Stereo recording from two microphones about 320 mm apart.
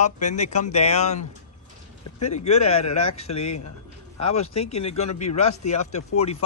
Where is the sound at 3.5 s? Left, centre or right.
Left.